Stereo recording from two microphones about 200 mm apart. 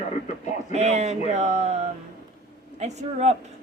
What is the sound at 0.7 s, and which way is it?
A woman's voice, 35° right (ahead or behind).